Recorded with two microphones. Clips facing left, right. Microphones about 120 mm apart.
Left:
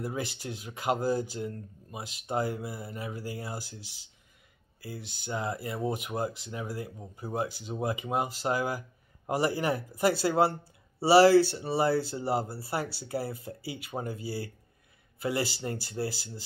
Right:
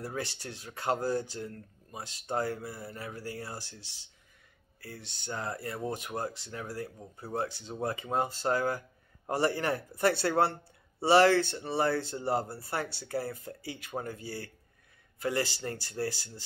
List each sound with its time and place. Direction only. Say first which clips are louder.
0.0 s speech: left 3 dB; 15° left (ahead or behind)
5.2 s speech: left 3 dB; 10° left (ahead or behind)